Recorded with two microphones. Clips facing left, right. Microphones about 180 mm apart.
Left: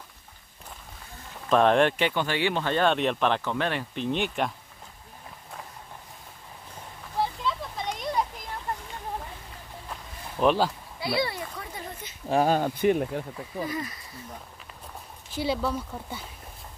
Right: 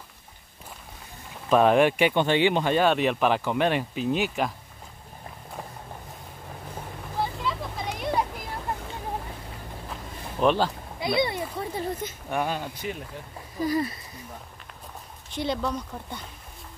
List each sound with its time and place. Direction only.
1.5 s speech: 5° right (ahead or behind)
3.9 s speech: 5° right (ahead or behind)
7.4 s a sound: 5° right (ahead or behind)
10.4 s speech: 5° left (ahead or behind)
11.0 s a sound: 20° right (ahead or behind)
12.3 s speech: 35° left (ahead or behind)
12.5 s speech: 50° left (ahead or behind)
13.7 s speech: 35° right (ahead or behind)
15.3 s speech: 5° left (ahead or behind)